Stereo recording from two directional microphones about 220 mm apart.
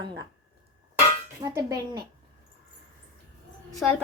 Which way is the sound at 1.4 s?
15° right (ahead or behind).